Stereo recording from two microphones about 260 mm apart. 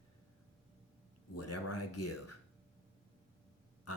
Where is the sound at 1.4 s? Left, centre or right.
Left.